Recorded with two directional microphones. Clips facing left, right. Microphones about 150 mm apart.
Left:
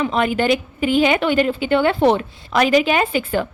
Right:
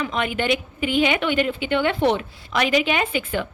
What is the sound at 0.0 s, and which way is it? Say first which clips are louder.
A woman's voice: left 6 dB; 35° left (ahead or behind).